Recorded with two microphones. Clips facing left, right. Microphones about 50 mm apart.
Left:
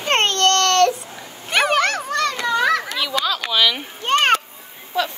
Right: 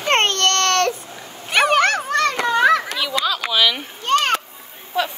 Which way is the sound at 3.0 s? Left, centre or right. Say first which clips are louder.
Even; centre.